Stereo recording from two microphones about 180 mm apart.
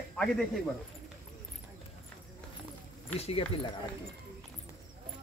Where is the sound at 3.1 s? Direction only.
35° left (ahead or behind).